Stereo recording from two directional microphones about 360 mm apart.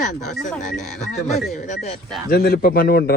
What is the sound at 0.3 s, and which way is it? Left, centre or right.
Speech, centre.